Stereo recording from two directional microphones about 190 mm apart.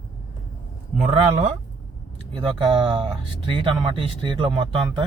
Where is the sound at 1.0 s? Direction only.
35° right (ahead or behind).